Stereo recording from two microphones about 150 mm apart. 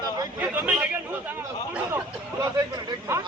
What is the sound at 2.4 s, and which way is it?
Speech, 20° right (ahead or behind).